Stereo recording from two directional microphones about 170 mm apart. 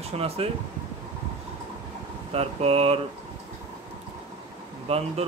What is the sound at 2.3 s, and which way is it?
Speech, 35° right (ahead or behind).